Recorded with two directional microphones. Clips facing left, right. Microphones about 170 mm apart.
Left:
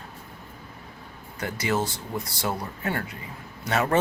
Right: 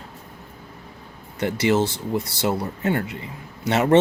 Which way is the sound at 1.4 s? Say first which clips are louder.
Right 7 dB; 25° right (ahead or behind).